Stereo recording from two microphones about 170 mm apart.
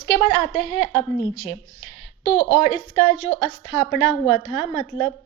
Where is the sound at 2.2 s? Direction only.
35° left (ahead or behind).